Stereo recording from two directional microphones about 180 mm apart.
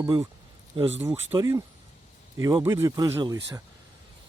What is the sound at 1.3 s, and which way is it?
Speech, 20° right (ahead or behind).